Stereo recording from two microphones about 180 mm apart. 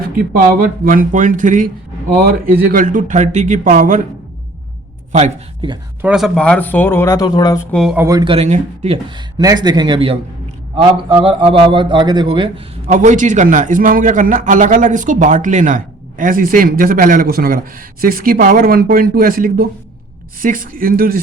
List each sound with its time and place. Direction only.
0.0 s a man's voice: 55° right (ahead or behind)
6.0 s speech: 5° right (ahead or behind); by 7.6 s 25° left (ahead or behind)
7.7 s speech: centre (ahead or behind)
7.9 s speech: 15° right (ahead or behind)
12.9 s a man's voice: 45° right (ahead or behind)